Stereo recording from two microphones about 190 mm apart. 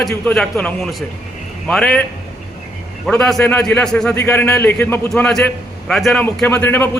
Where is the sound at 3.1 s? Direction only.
5° left (ahead or behind).